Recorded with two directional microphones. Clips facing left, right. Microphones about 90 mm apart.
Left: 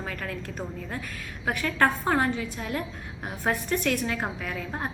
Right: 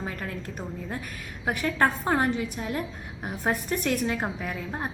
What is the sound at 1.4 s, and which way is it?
A woman's voice, 20° right (ahead or behind).